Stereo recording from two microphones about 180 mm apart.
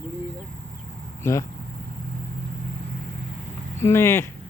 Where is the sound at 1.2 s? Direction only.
15° left (ahead or behind).